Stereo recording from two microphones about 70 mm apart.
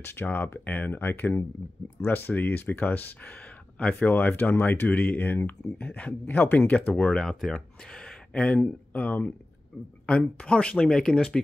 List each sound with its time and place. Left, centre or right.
0.0 s speech: left
7.2 s speech: centre
7.9 s a sound: centre
8.6 s speech: left; by 11.5 s centre